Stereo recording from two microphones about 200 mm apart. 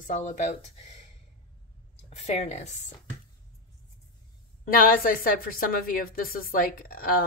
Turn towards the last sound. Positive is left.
turn(degrees=45)  # may be behind; listen again after turning